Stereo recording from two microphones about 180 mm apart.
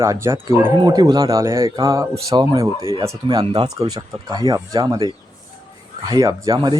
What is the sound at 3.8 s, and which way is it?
Speech, 20° right (ahead or behind).